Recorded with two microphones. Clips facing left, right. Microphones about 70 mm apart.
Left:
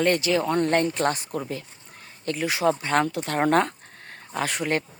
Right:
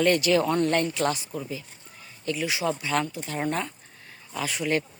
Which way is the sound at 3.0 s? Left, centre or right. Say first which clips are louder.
Left 6 dB; left.